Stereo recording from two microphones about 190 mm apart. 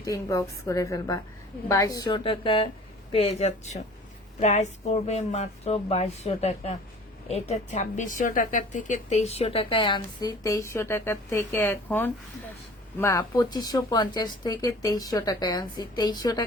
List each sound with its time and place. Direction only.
0.0 s a woman's voice: 15° left (ahead or behind)